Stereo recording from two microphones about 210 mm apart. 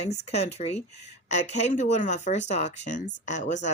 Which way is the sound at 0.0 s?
30° left (ahead or behind).